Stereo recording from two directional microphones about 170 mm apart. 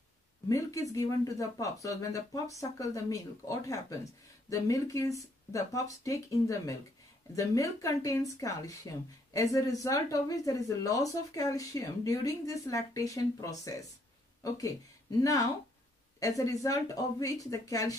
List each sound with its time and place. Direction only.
0.5 s speech: 20° left (ahead or behind)
16.2 s speech: 20° left (ahead or behind)